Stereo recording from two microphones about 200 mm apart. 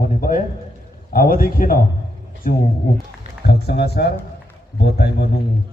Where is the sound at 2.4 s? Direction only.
45° left (ahead or behind).